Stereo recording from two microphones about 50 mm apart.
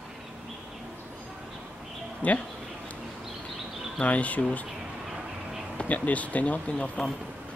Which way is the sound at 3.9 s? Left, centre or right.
Left.